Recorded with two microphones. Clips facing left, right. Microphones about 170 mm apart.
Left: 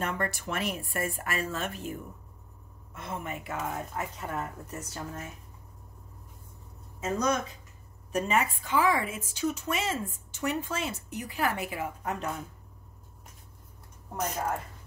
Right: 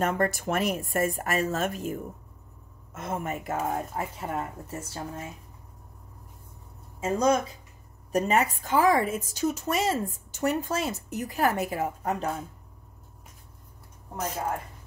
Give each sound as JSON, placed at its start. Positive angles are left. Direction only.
{"t": 0.0, "sound": "speech", "side_deg": -45}
{"t": 7.0, "sound": "a woman's voice", "side_deg": -30}